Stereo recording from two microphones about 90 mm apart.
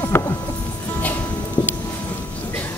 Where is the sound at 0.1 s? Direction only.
25° left (ahead or behind).